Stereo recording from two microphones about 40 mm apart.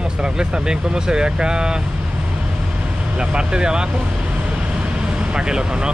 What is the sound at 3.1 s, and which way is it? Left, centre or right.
Vehicle, right.